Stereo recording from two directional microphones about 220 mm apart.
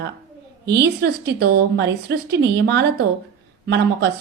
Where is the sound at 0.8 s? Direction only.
50° right (ahead or behind).